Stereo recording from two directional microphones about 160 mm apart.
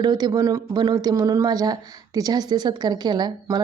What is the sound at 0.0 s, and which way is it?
Speech, 25° right (ahead or behind).